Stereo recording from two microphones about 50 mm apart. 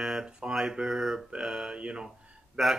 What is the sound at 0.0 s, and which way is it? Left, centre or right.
Mantra, centre.